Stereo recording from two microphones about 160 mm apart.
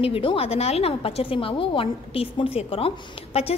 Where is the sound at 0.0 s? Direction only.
35° left (ahead or behind).